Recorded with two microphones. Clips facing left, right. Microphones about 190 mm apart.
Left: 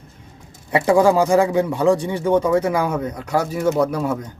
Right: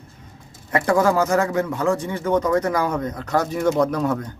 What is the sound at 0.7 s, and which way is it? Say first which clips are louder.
Speech: left 3 dB; 15° left (ahead or behind).